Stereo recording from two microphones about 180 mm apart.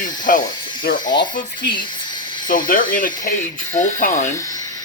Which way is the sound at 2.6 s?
50° left (ahead or behind).